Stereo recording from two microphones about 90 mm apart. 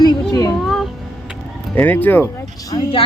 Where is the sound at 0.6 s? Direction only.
Centre (ahead or behind).